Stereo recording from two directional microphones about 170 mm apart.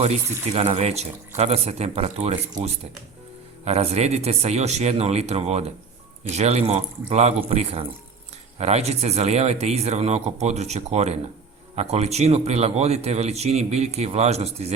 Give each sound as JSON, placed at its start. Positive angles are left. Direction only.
{"t": 0.0, "sound": "a man's voice", "side_deg": -40}